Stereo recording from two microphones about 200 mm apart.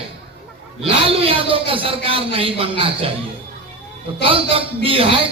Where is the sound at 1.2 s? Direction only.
25° right (ahead or behind).